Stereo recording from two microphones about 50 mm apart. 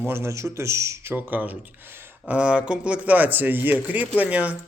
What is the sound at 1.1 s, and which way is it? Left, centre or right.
Speech, right.